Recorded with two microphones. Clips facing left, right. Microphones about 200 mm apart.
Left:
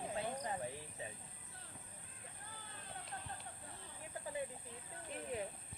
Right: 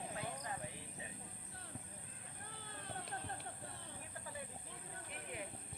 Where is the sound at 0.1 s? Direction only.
30° left (ahead or behind).